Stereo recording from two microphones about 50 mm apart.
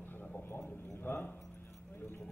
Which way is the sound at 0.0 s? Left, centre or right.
Left.